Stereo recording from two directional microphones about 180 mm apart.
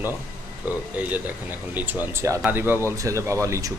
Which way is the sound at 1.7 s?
10° right (ahead or behind).